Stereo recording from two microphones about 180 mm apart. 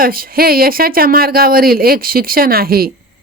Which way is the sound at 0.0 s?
55° right (ahead or behind).